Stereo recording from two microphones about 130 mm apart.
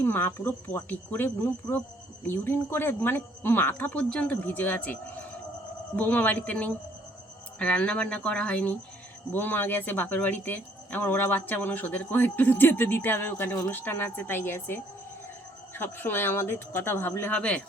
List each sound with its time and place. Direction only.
0.0 s speech: 15° left (ahead or behind)
6.0 s speech: 15° left (ahead or behind)